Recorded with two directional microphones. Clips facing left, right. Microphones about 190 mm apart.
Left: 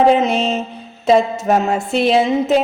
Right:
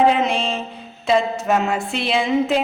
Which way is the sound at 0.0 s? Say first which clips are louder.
Left 4 dB; 40° left (ahead or behind).